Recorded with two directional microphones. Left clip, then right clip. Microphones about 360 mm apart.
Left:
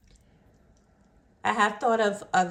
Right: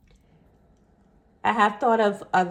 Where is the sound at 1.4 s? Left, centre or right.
Centre.